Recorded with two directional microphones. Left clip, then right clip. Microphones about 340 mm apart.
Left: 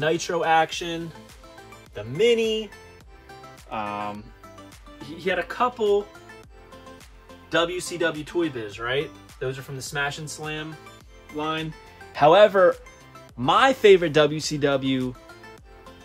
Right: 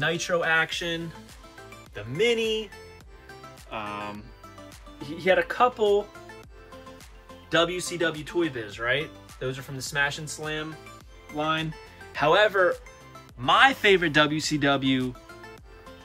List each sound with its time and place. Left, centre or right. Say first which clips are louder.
0.0 s speech: left 2 dB; centre
3.3 s music: left 3 dB; centre
7.5 s speech: even; centre
12.1 s speech: left 6 dB; centre